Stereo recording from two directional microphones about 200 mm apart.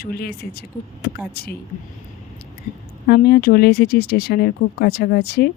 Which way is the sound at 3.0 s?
50° left (ahead or behind).